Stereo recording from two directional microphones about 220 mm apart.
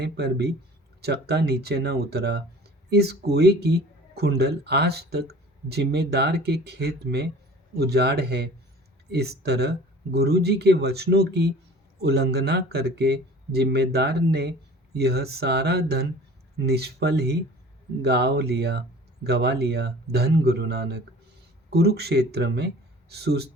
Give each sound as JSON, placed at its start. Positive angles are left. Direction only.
{"t": 0.0, "sound": "speech", "side_deg": -50}